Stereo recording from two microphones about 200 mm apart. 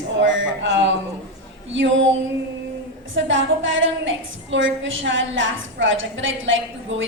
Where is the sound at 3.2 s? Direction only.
70° right (ahead or behind).